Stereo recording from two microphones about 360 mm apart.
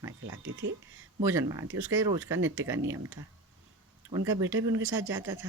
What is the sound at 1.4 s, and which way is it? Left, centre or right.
Speech, centre.